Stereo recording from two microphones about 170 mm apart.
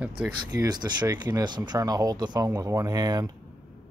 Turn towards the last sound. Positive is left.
turn(degrees=-20)  # may be behind; listen again after turning